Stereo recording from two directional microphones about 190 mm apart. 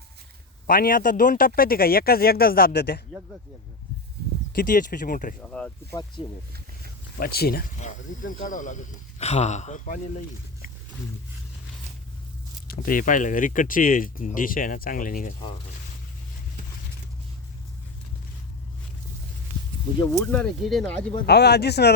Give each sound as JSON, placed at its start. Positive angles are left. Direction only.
{"t": 0.7, "sound": "speech", "side_deg": 50}
{"t": 4.5, "sound": "speech", "side_deg": 45}
{"t": 5.4, "sound": "speech", "side_deg": 5}
{"t": 6.2, "sound": "speech", "side_deg": 25}
{"t": 7.2, "sound": "speech", "side_deg": 55}
{"t": 7.8, "sound": "speech", "side_deg": 40}
{"t": 12.6, "sound": "speech", "side_deg": 45}
{"t": 20.3, "sound": "speech", "side_deg": 5}
{"t": 21.2, "sound": "speech", "side_deg": 60}